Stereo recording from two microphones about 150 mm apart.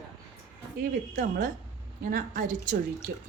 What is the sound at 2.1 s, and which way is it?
Speech, 70° right (ahead or behind).